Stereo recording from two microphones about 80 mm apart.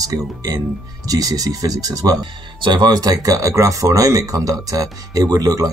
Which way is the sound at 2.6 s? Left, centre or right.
Right.